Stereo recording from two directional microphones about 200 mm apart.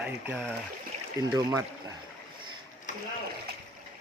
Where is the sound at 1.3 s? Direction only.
15° right (ahead or behind).